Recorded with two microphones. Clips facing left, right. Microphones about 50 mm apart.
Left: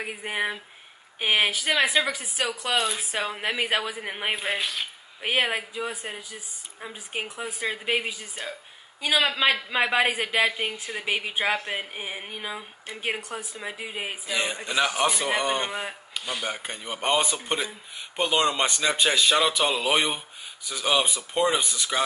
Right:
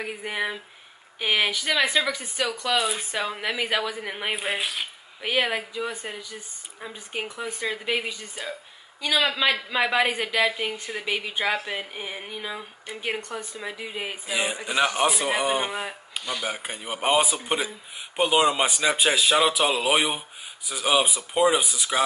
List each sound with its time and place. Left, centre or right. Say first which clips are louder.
0.0 s speech: even; centre
3.2 s speech: left 1 dB; centre
4.4 s speech: even; centre
5.2 s speech: even; centre
11.1 s speech: even; centre
14.2 s speech: right 1 dB; centre